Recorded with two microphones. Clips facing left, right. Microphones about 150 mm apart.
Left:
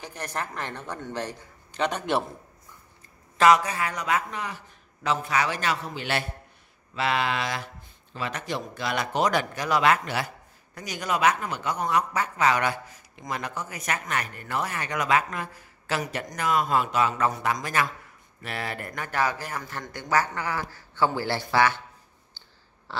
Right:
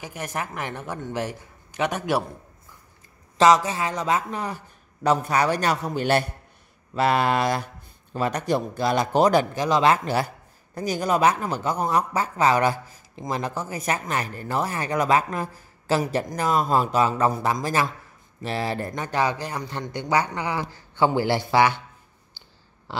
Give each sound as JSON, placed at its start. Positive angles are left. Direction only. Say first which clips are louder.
{"t": 0.0, "sound": "a man's voice", "louder": "right 2 dB", "side_deg": -10}
{"t": 3.3, "sound": "speech", "louder": "right 2 dB", "side_deg": -25}
{"t": 4.3, "sound": "a man's voice", "louder": "right 4 dB", "side_deg": -35}
{"t": 22.9, "sound": "a sound", "louder": "right 3 dB", "side_deg": -15}